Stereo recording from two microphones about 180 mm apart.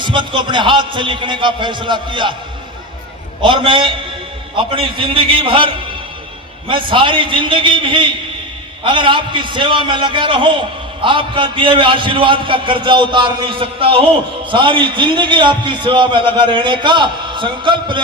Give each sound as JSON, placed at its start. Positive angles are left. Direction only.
{"t": 0.0, "sound": "a man's voice", "side_deg": -25}
{"t": 3.4, "sound": "a man's voice", "side_deg": -30}